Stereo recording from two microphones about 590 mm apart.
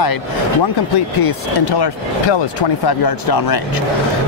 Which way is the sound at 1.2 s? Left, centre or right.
Left.